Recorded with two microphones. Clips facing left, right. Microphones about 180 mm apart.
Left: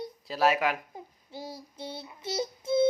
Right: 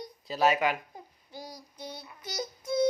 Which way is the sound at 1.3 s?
25° left (ahead or behind).